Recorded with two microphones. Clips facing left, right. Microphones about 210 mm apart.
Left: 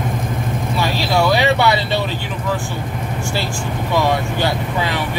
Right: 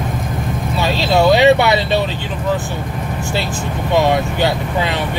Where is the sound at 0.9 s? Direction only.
20° right (ahead or behind).